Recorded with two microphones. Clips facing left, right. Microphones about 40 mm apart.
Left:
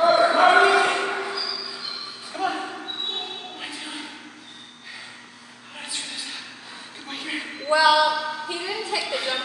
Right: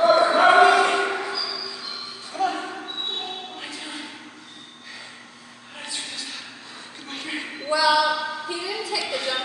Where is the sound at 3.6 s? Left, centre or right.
Centre.